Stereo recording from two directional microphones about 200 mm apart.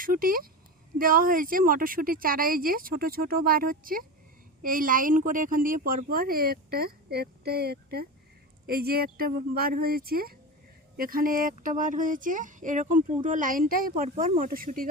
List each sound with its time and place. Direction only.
0.0 s a woman's voice: 45° right (ahead or behind)